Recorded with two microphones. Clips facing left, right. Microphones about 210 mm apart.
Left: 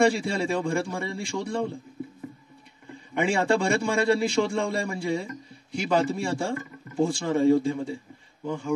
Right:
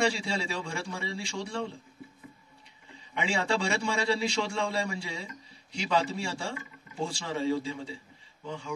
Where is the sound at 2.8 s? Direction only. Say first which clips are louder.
Left 8 dB; 55° left (ahead or behind).